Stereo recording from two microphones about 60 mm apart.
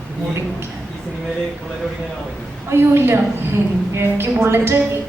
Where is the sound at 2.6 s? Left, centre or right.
Right.